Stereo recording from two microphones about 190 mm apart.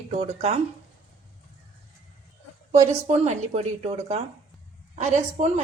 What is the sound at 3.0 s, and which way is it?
A woman's voice, 35° right (ahead or behind).